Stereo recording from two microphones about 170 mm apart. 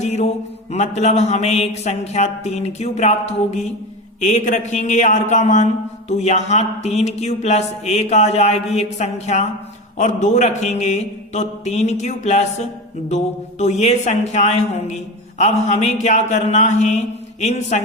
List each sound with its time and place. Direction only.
0.0 s mantra: 40° left (ahead or behind)
0.7 s a man's voice: 40° left (ahead or behind)